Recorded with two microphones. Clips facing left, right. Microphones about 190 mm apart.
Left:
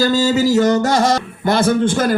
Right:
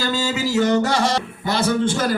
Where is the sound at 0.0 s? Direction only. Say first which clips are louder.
Left 8 dB; 40° left (ahead or behind).